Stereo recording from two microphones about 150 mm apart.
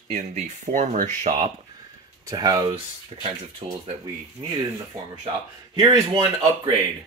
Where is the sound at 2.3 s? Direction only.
25° right (ahead or behind).